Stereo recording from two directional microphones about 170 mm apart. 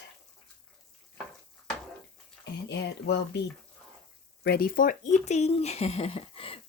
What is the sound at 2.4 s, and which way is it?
Speech, 80° left.